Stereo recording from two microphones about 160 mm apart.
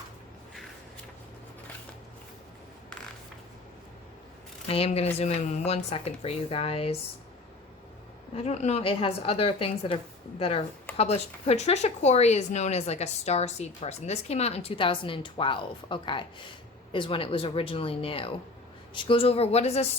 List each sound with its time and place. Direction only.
4.7 s speech: 40° left (ahead or behind)
8.4 s speech: 45° left (ahead or behind)